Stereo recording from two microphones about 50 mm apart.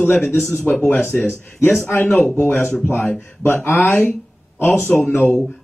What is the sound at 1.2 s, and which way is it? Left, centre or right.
Speech, left.